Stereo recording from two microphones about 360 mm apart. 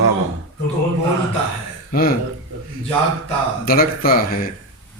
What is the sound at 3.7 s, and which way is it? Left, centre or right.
Speech, left.